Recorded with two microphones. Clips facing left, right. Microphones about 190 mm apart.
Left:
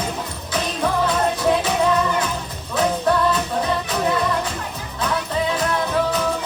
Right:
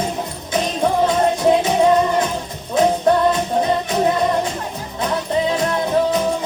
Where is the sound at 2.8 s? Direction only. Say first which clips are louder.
Right 4 dB; 25° right (ahead or behind).